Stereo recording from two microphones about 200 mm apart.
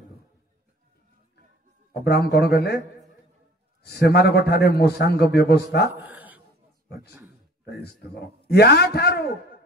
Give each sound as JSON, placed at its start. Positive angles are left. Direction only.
{"t": 2.0, "sound": "a man's voice", "side_deg": 55}
{"t": 3.8, "sound": "a man's voice", "side_deg": 55}
{"t": 5.9, "sound": "dog", "side_deg": -10}
{"t": 7.7, "sound": "a man's voice", "side_deg": 55}